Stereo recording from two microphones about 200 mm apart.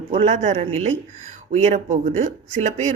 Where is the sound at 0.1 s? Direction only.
30° right (ahead or behind).